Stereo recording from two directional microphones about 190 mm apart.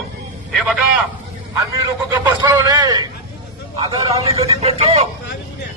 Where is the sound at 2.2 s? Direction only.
20° right (ahead or behind); by 5.0 s 35° right (ahead or behind).